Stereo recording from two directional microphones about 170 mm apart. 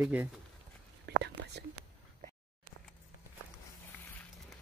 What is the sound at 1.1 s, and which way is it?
Whispering, 75° right (ahead or behind).